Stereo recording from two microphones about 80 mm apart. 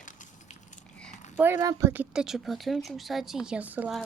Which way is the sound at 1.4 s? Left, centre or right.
Right.